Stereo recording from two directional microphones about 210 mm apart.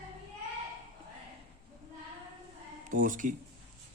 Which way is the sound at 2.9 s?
40° right (ahead or behind).